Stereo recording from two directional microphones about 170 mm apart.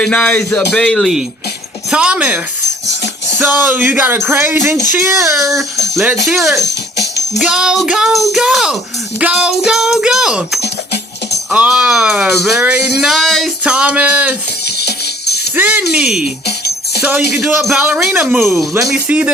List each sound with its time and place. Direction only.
0.0 s speech: 5° left (ahead or behind)
2.8 s music: 90° left
3.4 s speech: 10° right (ahead or behind)
6.2 s speech: centre (ahead or behind)
14.8 s music: 75° left (ahead or behind)
15.5 s speech: 10° right (ahead or behind)
16.5 s music: 75° left (ahead or behind)
17.0 s speech: 10° right (ahead or behind)
17.3 s speech: centre (ahead or behind)